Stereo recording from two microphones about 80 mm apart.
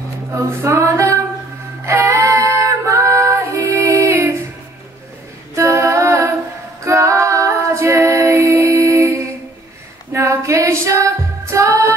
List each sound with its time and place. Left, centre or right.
0.4 s a sound: right
1.9 s female singing: right
5.6 s music: right
6.8 s female singing: right